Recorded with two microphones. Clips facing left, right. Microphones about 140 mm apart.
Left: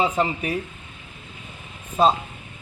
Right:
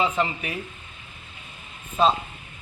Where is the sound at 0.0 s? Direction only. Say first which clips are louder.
Left 2 dB; 40° left (ahead or behind).